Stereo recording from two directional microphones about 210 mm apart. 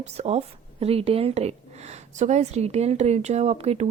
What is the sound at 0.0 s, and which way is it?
A woman's voice, 30° right (ahead or behind).